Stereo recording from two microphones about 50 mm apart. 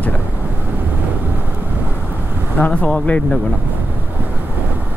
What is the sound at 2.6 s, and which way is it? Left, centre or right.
Speech, left.